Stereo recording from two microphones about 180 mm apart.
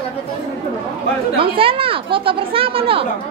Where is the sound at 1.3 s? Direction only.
30° right (ahead or behind).